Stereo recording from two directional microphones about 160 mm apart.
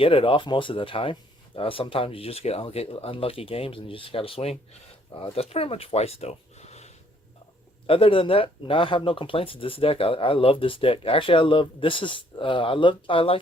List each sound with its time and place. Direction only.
0.0 s speech: 35° left (ahead or behind)